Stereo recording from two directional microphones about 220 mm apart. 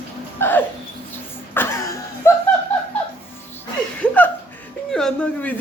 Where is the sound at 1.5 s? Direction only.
10° left (ahead or behind).